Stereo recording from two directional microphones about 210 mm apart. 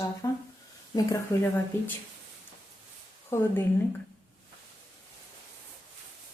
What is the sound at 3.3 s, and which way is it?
Speech, 10° left (ahead or behind).